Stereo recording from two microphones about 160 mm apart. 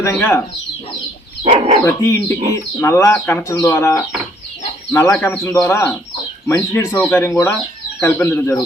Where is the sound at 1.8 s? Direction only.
20° left (ahead or behind).